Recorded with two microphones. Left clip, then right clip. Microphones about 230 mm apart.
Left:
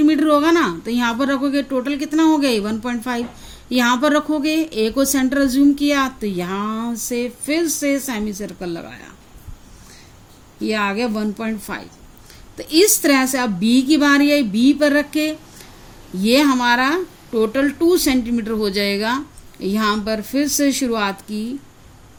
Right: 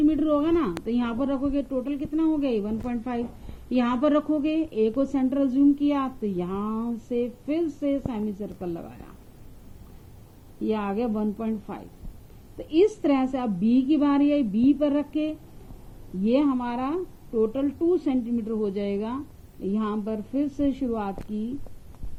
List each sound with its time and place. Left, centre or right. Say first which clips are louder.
0.0 s speech: left 8 dB; left
10.6 s speech: left 7 dB; left